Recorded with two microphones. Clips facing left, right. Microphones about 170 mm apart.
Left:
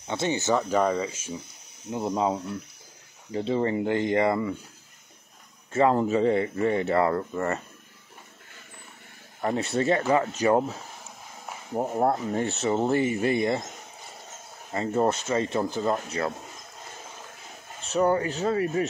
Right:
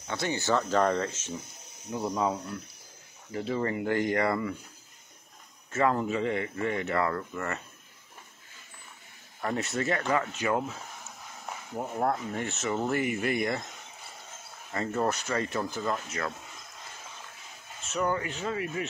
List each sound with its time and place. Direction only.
0.1 s speech: 20° left (ahead or behind)
1.9 s speech: 25° left (ahead or behind)
5.7 s speech: 30° left (ahead or behind)
9.4 s speech: 30° left (ahead or behind)
14.7 s speech: 25° left (ahead or behind)
17.8 s speech: 35° left (ahead or behind)